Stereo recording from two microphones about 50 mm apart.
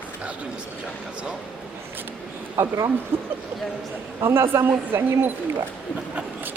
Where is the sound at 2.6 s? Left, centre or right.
Right.